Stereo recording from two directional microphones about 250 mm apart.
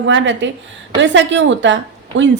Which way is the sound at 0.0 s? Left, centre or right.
Right.